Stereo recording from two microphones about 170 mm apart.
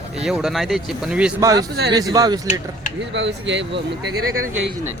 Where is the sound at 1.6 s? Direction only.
75° right (ahead or behind).